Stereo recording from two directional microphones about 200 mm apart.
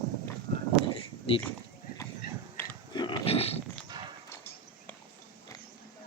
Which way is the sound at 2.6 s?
10° left (ahead or behind).